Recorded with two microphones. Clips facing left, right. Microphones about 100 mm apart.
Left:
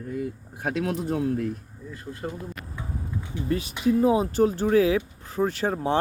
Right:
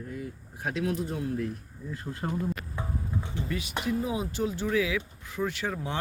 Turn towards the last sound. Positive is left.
turn(degrees=35)  # may be behind; listen again after turning